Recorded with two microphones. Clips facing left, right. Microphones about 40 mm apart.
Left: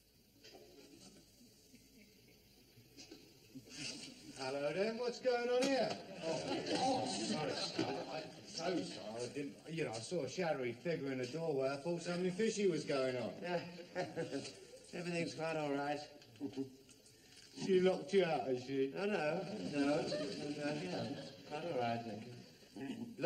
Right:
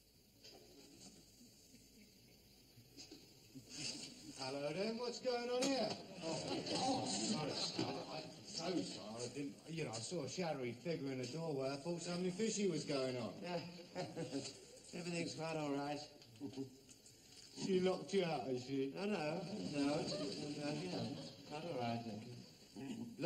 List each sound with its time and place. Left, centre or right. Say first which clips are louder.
3.6 s a man's voice: left 1 dB; centre